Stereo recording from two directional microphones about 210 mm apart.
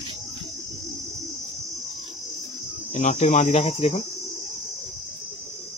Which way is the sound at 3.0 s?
30° left (ahead or behind).